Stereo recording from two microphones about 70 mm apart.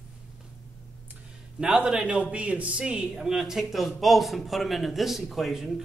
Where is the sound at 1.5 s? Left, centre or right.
Centre.